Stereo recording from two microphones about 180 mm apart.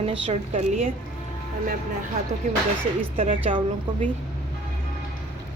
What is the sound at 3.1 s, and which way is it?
Speech, 30° right (ahead or behind).